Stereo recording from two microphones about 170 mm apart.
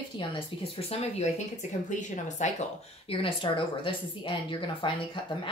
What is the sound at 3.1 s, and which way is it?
Speech, 30° left (ahead or behind).